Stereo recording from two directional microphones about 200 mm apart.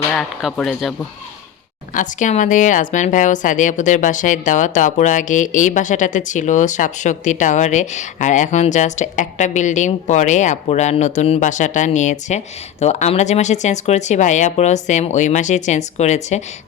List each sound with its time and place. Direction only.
0.1 s speech: centre (ahead or behind)
1.9 s speech: 40° left (ahead or behind)